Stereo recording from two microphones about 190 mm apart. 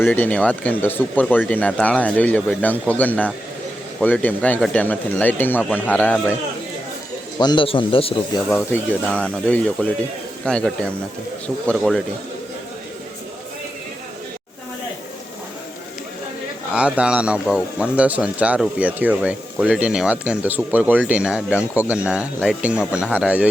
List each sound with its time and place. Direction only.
0.0 s speech: 10° left (ahead or behind)
7.3 s speech: 25° left (ahead or behind)
8.4 s speech: 10° left (ahead or behind)
16.7 s speech: 5° right (ahead or behind)